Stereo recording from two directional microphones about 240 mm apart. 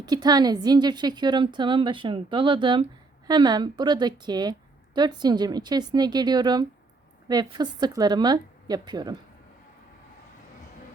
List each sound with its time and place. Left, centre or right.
0.0 s a woman's voice: centre